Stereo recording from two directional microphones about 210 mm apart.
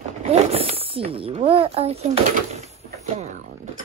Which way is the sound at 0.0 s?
30° right (ahead or behind).